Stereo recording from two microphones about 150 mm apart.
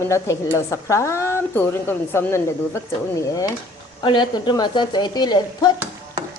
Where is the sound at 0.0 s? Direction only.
20° left (ahead or behind).